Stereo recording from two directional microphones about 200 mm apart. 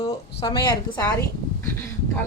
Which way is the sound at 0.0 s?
25° left (ahead or behind).